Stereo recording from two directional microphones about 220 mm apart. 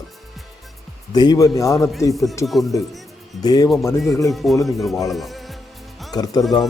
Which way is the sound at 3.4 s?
15° left (ahead or behind).